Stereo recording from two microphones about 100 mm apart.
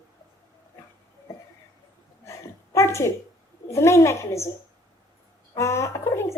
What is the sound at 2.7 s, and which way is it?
Speech, 30° left (ahead or behind).